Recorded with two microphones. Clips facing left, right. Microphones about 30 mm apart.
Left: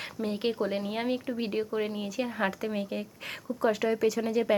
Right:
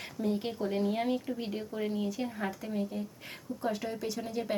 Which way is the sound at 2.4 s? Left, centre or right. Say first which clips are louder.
Left 4 dB; left.